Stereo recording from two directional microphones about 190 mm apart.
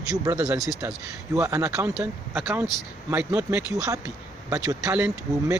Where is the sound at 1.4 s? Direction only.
15° right (ahead or behind).